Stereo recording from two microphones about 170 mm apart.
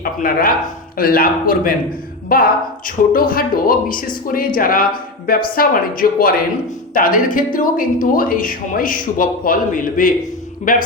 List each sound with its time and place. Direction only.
0.0 s a man's voice: 60° left (ahead or behind)